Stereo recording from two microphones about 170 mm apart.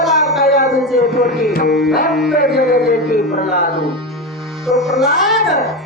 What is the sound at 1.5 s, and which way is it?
A man's voice, 65° left (ahead or behind).